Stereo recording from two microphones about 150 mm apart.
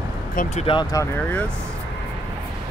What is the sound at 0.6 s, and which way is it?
Speech, 35° left (ahead or behind).